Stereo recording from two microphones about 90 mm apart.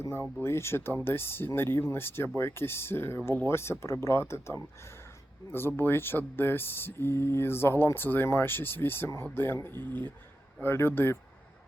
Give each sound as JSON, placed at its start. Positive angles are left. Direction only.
{"t": 0.4, "sound": "speech", "side_deg": 30}